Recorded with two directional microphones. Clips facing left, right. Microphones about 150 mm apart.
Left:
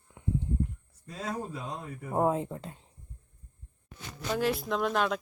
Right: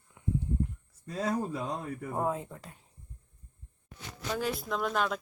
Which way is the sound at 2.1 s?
25° left (ahead or behind).